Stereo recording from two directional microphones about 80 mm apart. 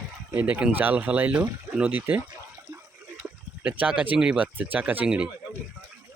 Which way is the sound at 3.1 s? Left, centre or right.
Right.